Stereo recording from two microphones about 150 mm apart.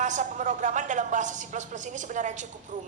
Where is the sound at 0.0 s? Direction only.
55° right (ahead or behind).